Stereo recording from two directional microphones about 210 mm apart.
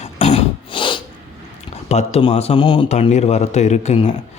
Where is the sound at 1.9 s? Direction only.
30° left (ahead or behind).